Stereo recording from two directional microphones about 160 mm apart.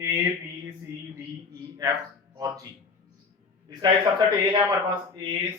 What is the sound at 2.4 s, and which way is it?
Speech, 20° right (ahead or behind).